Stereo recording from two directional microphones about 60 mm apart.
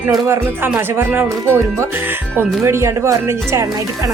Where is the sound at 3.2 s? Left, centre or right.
Right.